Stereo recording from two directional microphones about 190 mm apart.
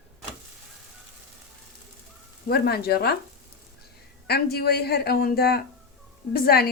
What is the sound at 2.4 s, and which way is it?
Speech, 55° left (ahead or behind).